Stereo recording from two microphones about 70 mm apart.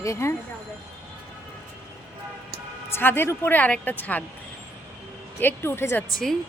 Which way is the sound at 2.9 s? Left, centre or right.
Left.